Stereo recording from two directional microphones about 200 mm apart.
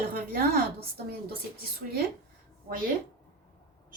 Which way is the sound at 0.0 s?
50° right (ahead or behind).